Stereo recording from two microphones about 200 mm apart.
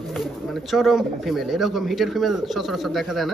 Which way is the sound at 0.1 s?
Centre (ahead or behind).